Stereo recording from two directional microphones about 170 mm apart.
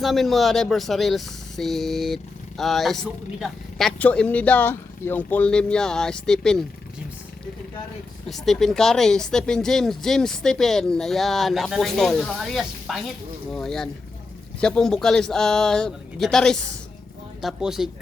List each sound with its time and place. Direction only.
0.0 s speech: centre (ahead or behind)
8.3 s speech: centre (ahead or behind)